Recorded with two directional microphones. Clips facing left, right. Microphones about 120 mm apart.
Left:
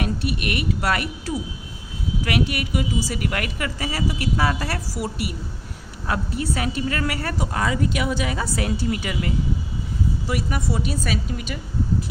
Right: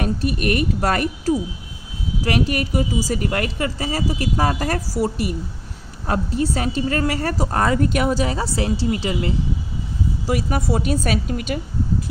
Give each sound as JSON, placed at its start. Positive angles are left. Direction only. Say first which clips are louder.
{"t": 0.0, "sound": "a woman's voice", "louder": "right 4 dB", "side_deg": -40}
{"t": 10.2, "sound": "a woman's voice", "louder": "right 7 dB", "side_deg": -40}